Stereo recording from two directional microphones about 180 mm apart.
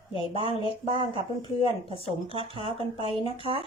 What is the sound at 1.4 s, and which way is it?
Speech, 30° left (ahead or behind).